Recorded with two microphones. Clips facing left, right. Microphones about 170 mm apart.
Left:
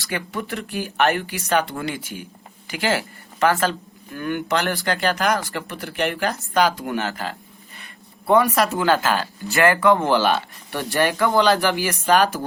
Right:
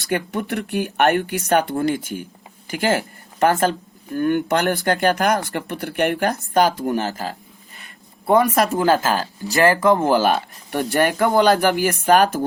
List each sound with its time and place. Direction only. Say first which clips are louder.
0.0 s speech: right 5 dB; 55° right (ahead or behind)